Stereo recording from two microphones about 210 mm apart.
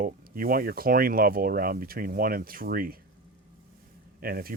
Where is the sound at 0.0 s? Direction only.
45° right (ahead or behind).